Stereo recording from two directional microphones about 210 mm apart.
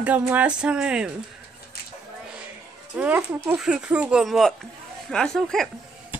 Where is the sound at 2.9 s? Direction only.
10° right (ahead or behind).